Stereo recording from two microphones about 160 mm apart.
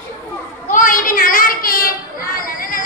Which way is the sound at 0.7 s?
60° left (ahead or behind).